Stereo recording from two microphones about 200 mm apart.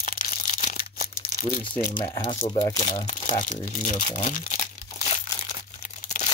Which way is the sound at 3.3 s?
35° left (ahead or behind).